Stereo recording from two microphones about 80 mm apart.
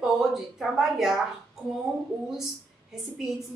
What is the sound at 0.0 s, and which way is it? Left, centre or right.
A woman's voice, centre.